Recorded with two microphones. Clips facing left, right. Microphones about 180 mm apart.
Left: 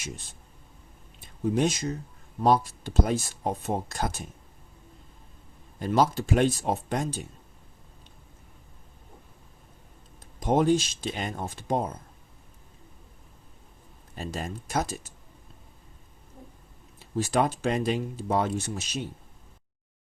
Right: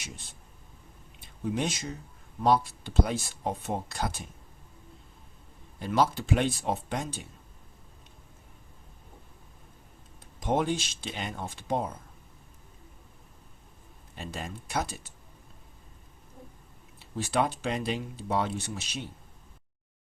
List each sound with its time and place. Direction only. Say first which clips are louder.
1.5 s speech: left 7 dB; 40° left (ahead or behind)
5.8 s speech: left 3 dB; 45° left (ahead or behind)
10.4 s speech: left 5 dB; 40° left (ahead or behind)
14.2 s speech: left 4 dB; 40° left (ahead or behind)
17.2 s speech: left 3 dB; 45° left (ahead or behind)